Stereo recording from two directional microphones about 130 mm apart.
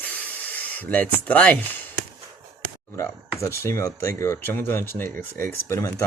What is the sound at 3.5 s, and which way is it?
Speech, 20° left (ahead or behind).